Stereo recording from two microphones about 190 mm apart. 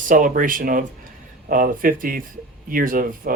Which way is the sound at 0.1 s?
45° right (ahead or behind).